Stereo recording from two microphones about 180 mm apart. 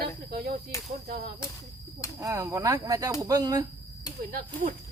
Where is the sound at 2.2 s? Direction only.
20° right (ahead or behind).